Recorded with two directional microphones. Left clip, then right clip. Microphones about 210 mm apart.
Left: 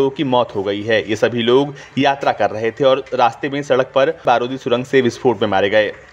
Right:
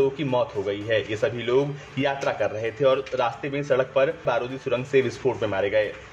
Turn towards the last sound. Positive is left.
turn(degrees=30)  # may be behind; listen again after turning